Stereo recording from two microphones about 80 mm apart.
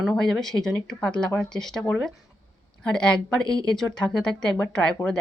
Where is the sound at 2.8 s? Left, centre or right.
Centre.